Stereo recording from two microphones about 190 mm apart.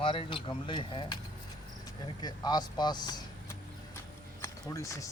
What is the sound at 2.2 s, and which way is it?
Speech, 20° left (ahead or behind).